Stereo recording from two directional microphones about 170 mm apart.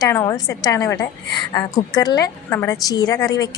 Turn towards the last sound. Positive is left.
turn(degrees=20)  # may be behind; listen again after turning